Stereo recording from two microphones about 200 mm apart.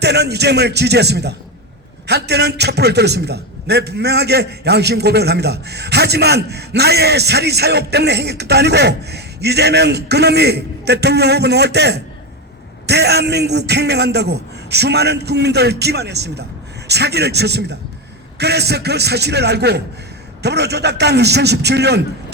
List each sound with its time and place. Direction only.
0.0 s a man's voice: 55° right (ahead or behind)